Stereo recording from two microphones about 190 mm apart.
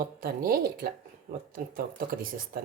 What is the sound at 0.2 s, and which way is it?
Speech, 50° right (ahead or behind).